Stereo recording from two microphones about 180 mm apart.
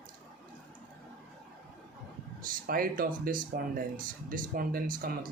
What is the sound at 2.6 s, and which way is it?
Speech, 50° right (ahead or behind).